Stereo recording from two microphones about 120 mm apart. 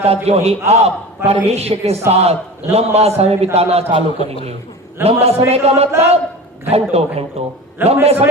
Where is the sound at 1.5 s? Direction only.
60° right (ahead or behind).